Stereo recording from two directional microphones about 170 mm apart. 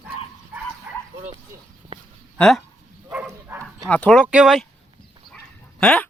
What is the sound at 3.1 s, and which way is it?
Dog, 10° right (ahead or behind).